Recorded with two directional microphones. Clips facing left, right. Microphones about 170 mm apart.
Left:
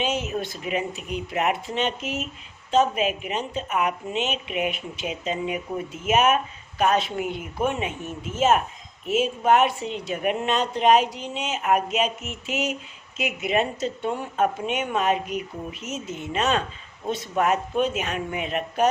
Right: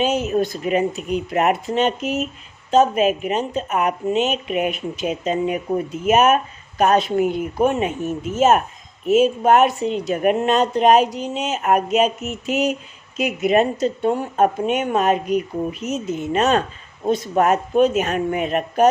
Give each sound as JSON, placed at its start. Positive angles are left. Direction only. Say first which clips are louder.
{"t": 0.0, "sound": "speech", "louder": "right 7 dB", "side_deg": -40}